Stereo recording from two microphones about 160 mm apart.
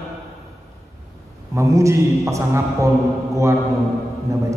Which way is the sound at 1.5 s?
20° right (ahead or behind).